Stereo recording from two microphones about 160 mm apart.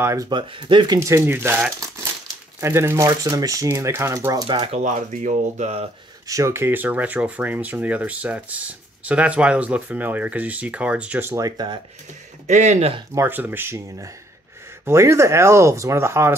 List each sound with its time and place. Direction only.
0.0 s speech: 20° right (ahead or behind)
0.9 s speech: 15° right (ahead or behind)
4.7 s speech: 50° right (ahead or behind)
6.2 s speech: 20° right (ahead or behind)
12.4 s speech: 45° right (ahead or behind)
13.1 s speech: 15° right (ahead or behind)